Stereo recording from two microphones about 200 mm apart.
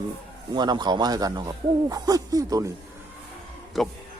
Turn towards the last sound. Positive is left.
turn(degrees=0)  # may be behind; listen again after turning